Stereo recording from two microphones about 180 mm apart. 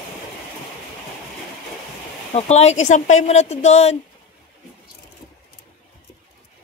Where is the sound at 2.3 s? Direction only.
35° left (ahead or behind).